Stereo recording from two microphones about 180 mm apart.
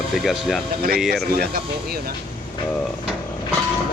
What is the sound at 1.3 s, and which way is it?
Speech, 60° right (ahead or behind).